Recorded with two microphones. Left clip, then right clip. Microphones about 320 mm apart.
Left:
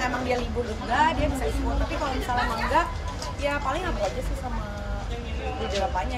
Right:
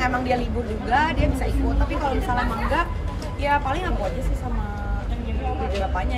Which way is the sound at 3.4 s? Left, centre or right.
Centre.